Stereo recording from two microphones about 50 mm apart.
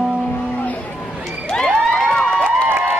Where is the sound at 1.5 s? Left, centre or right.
Centre.